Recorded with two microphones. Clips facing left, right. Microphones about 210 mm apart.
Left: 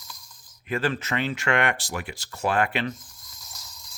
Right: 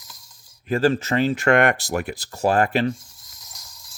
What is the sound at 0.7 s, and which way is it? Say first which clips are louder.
Speech: right 7 dB; 40° right (ahead or behind).